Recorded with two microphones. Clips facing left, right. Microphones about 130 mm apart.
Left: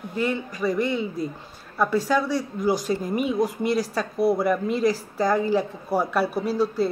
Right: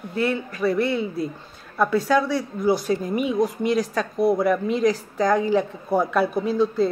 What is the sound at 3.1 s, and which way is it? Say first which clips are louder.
A woman's voice: even; centre (ahead or behind).